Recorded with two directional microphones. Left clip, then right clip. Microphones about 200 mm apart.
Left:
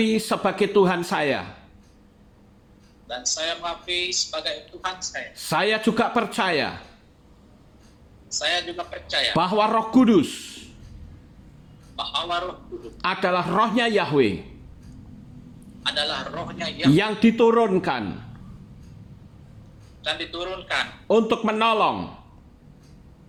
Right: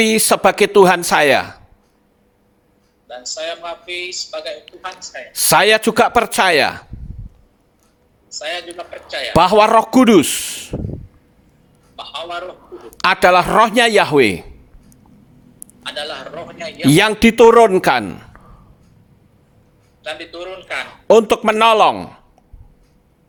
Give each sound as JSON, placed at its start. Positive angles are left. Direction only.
{"t": 0.0, "sound": "speech", "side_deg": -45}
{"t": 3.1, "sound": "speech", "side_deg": 0}
{"t": 5.3, "sound": "speech", "side_deg": -45}
{"t": 8.3, "sound": "speech", "side_deg": 0}
{"t": 9.3, "sound": "speech", "side_deg": -50}
{"t": 11.9, "sound": "speech", "side_deg": 0}
{"t": 13.0, "sound": "speech", "side_deg": -50}
{"t": 15.8, "sound": "speech", "side_deg": 0}
{"t": 16.9, "sound": "speech", "side_deg": -50}
{"t": 20.0, "sound": "speech", "side_deg": 0}
{"t": 21.1, "sound": "speech", "side_deg": -50}